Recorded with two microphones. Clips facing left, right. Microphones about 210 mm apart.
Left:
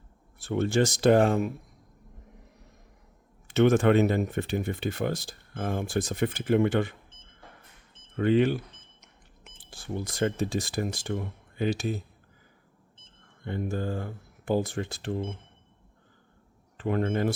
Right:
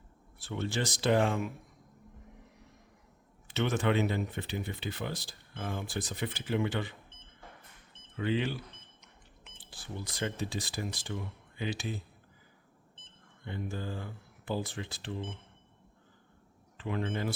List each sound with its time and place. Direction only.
0.4 s speech: 50° left (ahead or behind)
3.4 s speech: 45° left (ahead or behind)
8.1 s speech: 50° left (ahead or behind)
13.4 s speech: 50° left (ahead or behind)
16.7 s speech: 50° left (ahead or behind)